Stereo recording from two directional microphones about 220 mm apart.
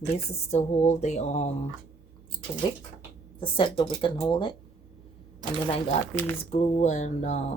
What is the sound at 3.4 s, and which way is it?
Speech, 25° left (ahead or behind).